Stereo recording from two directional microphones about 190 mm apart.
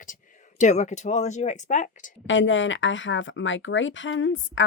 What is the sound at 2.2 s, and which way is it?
Speech, 80° left.